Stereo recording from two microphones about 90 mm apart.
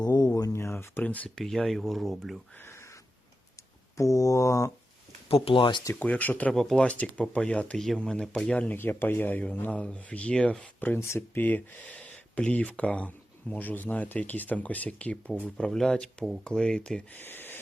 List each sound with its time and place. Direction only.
0.0 s a sound: 45° left (ahead or behind)
0.5 s a sound: 30° left (ahead or behind)
1.0 s speech: 15° left (ahead or behind)
1.4 s speech: 5° left (ahead or behind)
2.6 s a sound: 30° left (ahead or behind)
5.3 s speech: 80° left
5.9 s speech: 20° left (ahead or behind)
6.5 s speech: 5° left (ahead or behind)
6.8 s speech: 15° left (ahead or behind); by 11.4 s 30° left (ahead or behind)
11.4 s speech: 20° left (ahead or behind)
17.1 s speech: 20° left (ahead or behind)